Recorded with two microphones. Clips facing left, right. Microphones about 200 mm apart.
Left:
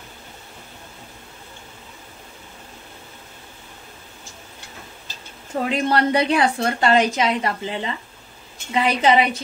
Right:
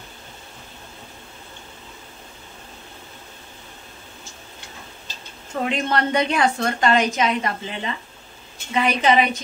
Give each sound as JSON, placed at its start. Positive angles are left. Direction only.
{"t": 5.5, "sound": "a woman's voice", "side_deg": 30}